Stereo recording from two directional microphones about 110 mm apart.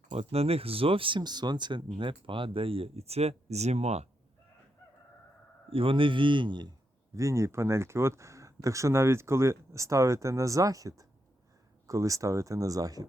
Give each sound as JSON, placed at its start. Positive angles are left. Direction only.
{"t": 0.1, "sound": "speech", "side_deg": -70}
{"t": 5.7, "sound": "a man's voice", "side_deg": -55}
{"t": 7.2, "sound": "speech", "side_deg": -25}